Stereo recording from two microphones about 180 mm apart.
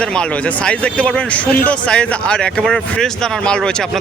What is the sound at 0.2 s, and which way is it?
Speech, 5° left (ahead or behind).